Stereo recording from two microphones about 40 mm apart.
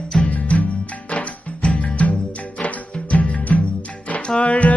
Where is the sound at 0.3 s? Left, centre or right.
Left.